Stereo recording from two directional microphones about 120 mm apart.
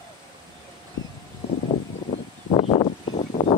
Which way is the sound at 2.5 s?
55° left (ahead or behind).